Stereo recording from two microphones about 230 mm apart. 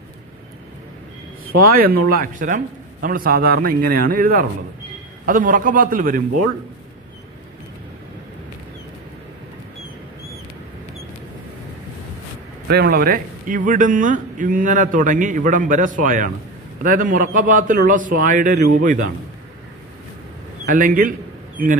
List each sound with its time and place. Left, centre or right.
1.5 s a man's voice: right
12.6 s a man's voice: right
20.6 s a man's voice: right